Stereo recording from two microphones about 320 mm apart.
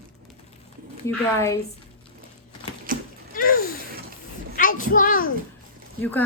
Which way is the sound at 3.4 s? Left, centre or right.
Left.